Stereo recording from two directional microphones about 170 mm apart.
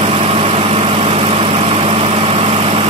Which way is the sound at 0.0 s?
35° right (ahead or behind).